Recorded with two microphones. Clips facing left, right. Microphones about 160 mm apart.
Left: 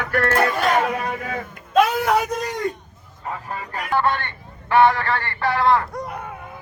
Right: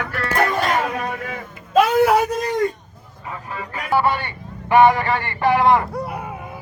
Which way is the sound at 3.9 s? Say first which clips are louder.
Right 2 dB; 10° right (ahead or behind).